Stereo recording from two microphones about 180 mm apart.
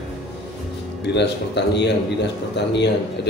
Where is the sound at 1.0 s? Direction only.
70° left (ahead or behind).